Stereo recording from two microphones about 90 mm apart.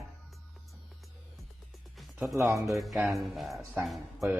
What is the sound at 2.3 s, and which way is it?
Speech, 35° right (ahead or behind).